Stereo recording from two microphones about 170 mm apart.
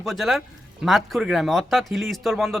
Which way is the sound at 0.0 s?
Centre (ahead or behind).